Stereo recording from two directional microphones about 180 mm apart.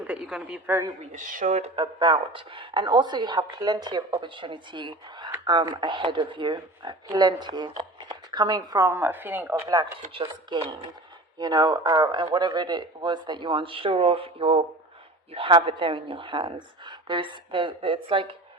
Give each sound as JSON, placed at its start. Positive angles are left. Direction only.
{"t": 0.1, "sound": "a woman's voice", "side_deg": -5}
{"t": 1.1, "sound": "speech", "side_deg": -45}
{"t": 1.7, "sound": "a woman's voice", "side_deg": -25}
{"t": 10.1, "sound": "a woman's voice", "side_deg": -30}